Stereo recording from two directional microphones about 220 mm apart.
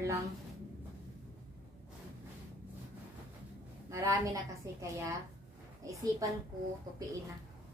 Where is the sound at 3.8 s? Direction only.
15° right (ahead or behind).